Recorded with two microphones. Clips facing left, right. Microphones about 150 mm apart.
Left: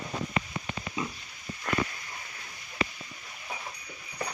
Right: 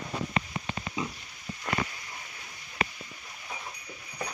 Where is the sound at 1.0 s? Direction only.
20° right (ahead or behind).